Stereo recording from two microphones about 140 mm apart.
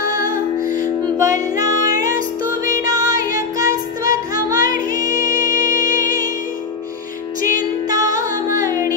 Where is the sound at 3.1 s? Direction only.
25° right (ahead or behind).